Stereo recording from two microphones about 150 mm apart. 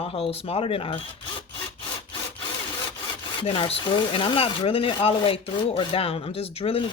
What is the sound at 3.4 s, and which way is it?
Speech, 35° left (ahead or behind).